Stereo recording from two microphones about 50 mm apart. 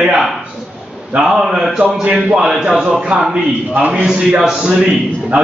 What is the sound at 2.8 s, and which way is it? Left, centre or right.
A man's voice, right.